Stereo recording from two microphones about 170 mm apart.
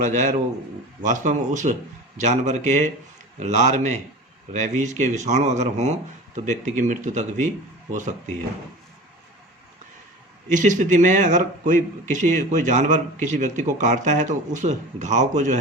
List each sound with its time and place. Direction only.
0.0 s a man's voice: 45° right (ahead or behind)
10.5 s a man's voice: 45° right (ahead or behind)